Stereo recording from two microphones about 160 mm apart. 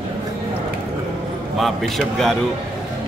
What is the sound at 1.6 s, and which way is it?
Speech, centre (ahead or behind).